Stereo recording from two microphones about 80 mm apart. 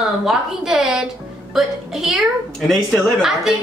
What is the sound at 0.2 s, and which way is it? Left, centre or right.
A woman's voice, centre.